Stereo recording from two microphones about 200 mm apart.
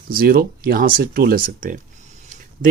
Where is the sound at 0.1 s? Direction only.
45° right (ahead or behind).